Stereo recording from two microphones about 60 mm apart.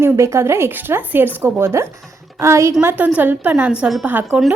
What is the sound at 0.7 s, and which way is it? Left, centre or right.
A woman's voice, right.